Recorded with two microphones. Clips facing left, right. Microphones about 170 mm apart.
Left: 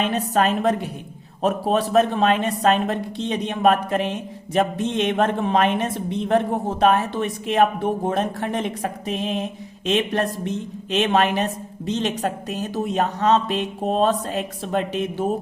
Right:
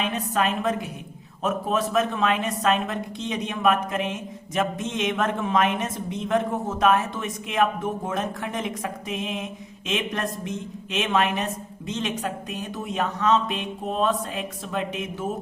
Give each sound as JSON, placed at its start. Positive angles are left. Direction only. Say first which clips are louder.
{"t": 0.0, "sound": "speech", "louder": "left 5 dB", "side_deg": 35}